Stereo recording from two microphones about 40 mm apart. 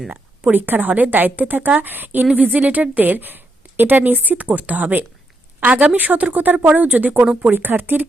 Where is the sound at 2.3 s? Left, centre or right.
Right.